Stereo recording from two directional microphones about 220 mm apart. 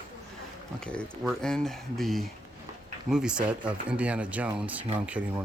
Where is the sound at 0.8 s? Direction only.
5° left (ahead or behind).